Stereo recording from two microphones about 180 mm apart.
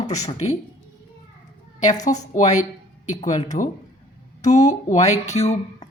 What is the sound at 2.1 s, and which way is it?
A woman's voice, 45° left (ahead or behind).